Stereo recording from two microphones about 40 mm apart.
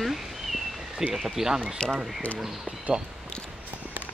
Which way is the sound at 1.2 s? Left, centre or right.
Centre.